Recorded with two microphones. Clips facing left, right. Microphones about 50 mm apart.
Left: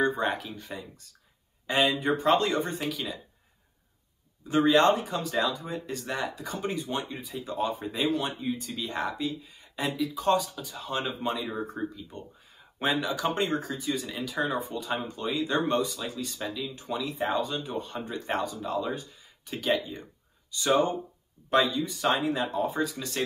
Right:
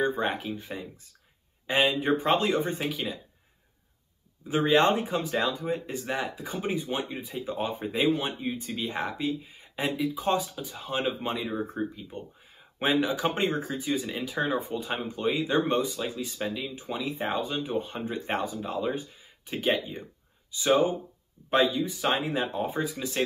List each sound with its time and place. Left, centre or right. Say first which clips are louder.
0.2 s speech: even; centre
4.5 s speech: left 1 dB; centre